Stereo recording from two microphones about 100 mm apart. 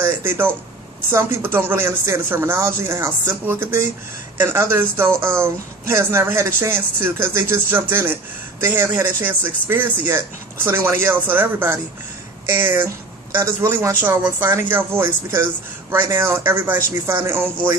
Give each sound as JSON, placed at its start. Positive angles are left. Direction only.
{"t": 0.0, "sound": "speech", "side_deg": -20}